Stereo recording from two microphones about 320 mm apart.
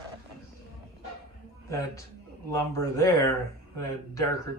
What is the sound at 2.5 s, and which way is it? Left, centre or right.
Speech, centre.